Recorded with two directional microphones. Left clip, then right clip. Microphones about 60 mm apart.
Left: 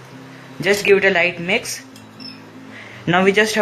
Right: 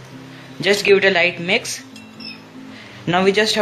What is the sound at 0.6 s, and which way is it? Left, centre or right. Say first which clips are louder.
Speech: even; right.